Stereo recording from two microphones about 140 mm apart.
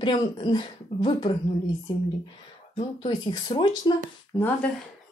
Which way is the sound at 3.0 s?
30° left (ahead or behind).